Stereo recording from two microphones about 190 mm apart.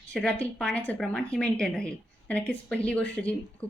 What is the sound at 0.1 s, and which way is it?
Speech, 5° left (ahead or behind).